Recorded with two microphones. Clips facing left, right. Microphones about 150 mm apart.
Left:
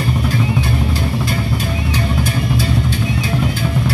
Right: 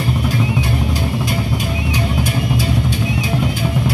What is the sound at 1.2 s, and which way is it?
Music, 15° right (ahead or behind).